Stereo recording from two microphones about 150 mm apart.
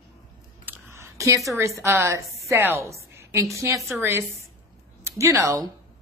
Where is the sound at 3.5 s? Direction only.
20° right (ahead or behind).